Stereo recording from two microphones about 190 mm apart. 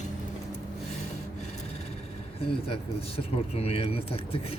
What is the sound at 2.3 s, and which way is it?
Speech, 30° left (ahead or behind).